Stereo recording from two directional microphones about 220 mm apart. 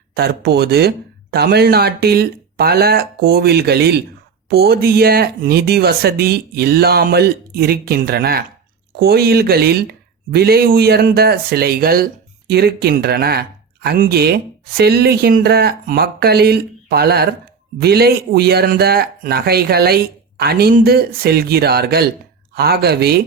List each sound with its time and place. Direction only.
0.1 s speech: 45° right (ahead or behind)